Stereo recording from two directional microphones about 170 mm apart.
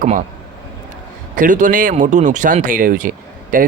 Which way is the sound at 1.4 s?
50° right (ahead or behind).